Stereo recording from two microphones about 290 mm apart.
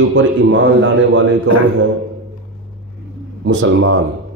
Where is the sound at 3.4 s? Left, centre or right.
Right.